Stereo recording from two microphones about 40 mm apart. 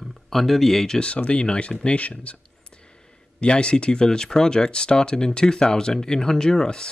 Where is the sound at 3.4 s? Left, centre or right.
Left.